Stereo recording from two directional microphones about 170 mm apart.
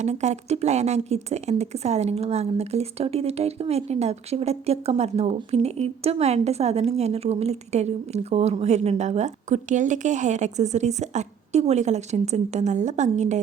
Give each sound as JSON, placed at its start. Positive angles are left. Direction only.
{"t": 0.0, "sound": "speech", "side_deg": -40}